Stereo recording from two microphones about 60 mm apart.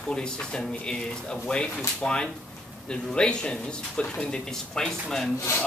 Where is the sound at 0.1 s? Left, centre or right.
Centre.